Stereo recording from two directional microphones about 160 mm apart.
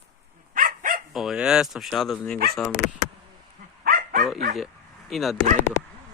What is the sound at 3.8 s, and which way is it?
Dog, 65° right (ahead or behind).